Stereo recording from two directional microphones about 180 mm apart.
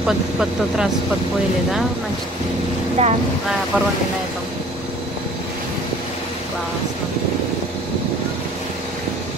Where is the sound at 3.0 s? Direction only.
40° right (ahead or behind).